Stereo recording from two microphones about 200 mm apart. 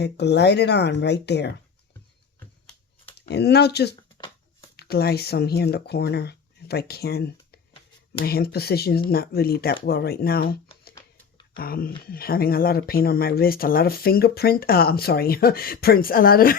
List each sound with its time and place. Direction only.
0.0 s speech: 55° left (ahead or behind)
3.2 s speech: 55° left (ahead or behind)